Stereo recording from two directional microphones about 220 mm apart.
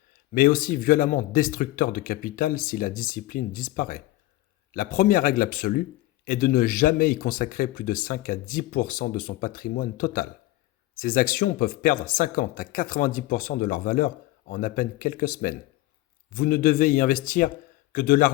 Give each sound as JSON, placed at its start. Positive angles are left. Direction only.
{"t": 0.3, "sound": "speech", "side_deg": 40}